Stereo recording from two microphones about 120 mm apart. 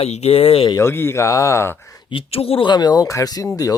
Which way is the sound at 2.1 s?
55° left (ahead or behind).